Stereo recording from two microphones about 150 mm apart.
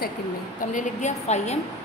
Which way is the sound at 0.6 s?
60° left (ahead or behind).